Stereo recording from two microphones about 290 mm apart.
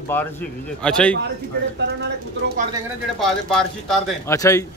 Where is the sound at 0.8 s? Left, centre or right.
Centre.